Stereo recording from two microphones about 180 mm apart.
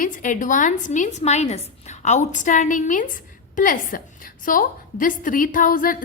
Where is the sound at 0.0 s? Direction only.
45° left (ahead or behind).